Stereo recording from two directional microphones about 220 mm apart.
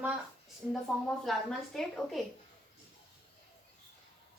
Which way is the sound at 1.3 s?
Centre (ahead or behind).